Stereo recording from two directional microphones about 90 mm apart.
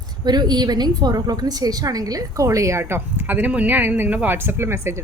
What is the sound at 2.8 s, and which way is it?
Speech, 25° right (ahead or behind).